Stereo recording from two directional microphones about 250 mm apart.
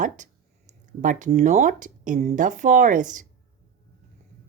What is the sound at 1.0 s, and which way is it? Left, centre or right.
Speech, right.